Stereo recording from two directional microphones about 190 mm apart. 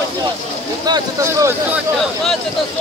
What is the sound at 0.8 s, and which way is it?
Speech, 20° right (ahead or behind).